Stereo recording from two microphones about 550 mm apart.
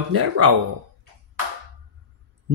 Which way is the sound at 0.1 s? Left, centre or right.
Right.